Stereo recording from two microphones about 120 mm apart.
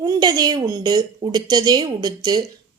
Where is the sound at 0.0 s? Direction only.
35° right (ahead or behind).